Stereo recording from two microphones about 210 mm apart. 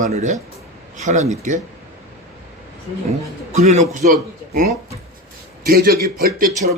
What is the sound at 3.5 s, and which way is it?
Speech, 30° right (ahead or behind).